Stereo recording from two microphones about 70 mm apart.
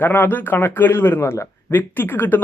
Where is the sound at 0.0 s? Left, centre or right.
Left.